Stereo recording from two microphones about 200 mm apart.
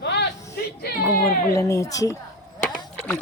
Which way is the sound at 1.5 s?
15° left (ahead or behind).